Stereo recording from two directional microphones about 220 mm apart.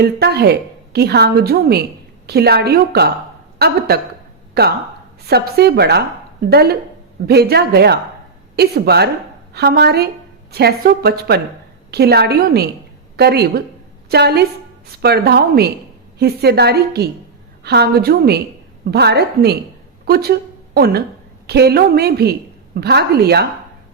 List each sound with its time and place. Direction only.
0.0 s a woman's voice: 45° right (ahead or behind)
5.3 s a woman's voice: 45° right (ahead or behind)